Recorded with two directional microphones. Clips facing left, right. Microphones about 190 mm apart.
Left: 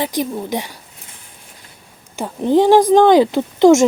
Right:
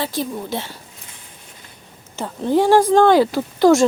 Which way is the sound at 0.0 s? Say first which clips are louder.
Left 3 dB; 15° left (ahead or behind).